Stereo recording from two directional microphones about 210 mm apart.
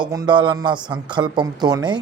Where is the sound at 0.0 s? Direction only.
20° right (ahead or behind).